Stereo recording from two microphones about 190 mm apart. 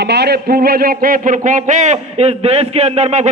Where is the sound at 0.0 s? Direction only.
60° right (ahead or behind).